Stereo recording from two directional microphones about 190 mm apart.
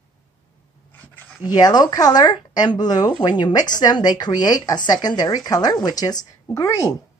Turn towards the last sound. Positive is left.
turn(degrees=15)  # may be behind; listen again after turning